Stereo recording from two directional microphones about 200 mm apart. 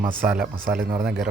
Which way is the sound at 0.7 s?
45° right (ahead or behind).